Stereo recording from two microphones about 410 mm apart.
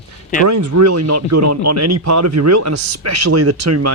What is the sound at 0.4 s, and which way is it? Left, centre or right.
Speech, right.